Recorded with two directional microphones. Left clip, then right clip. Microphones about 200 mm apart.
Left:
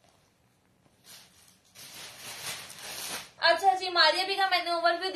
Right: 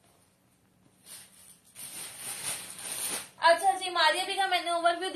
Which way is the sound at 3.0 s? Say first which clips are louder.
Right 1 dB; 45° left (ahead or behind).